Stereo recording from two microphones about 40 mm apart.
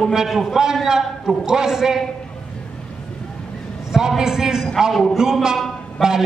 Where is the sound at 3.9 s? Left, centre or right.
Centre.